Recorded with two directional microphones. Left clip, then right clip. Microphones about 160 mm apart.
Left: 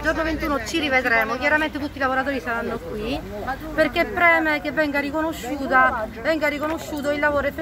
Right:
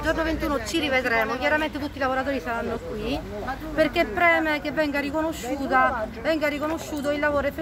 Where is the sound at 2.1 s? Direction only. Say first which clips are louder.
Left 3 dB; centre (ahead or behind).